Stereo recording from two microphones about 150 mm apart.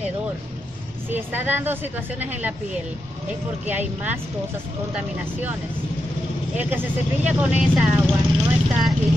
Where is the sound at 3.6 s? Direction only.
10° right (ahead or behind).